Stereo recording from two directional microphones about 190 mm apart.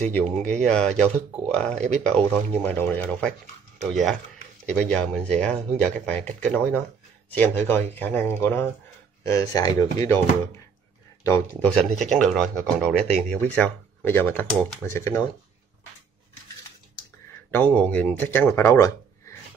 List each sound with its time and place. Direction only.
0.0 s speech: 10° left (ahead or behind)
11.2 s speech: 10° left (ahead or behind)
17.5 s speech: 10° left (ahead or behind)